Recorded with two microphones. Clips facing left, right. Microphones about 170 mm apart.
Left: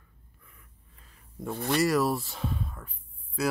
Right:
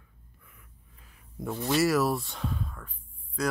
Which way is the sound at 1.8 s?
Centre (ahead or behind).